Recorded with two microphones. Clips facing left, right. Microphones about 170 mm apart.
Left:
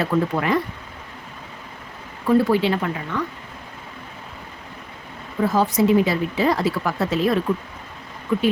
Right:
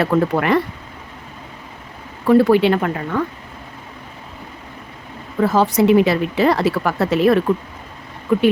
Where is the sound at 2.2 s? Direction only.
70° right (ahead or behind); by 3.2 s 50° right (ahead or behind).